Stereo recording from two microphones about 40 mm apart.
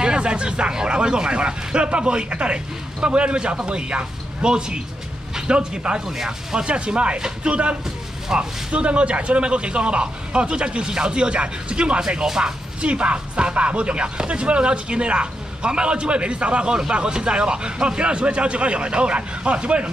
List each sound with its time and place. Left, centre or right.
0.0 s speech: right
6.6 s speech: right
7.2 s speech: centre
8.7 s speech: right
12.8 s speech: right